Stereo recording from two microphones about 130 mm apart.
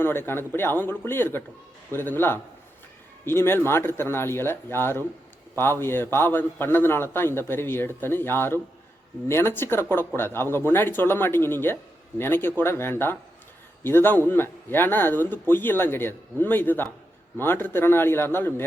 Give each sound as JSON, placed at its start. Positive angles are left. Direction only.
{"t": 0.0, "sound": "speech", "side_deg": 15}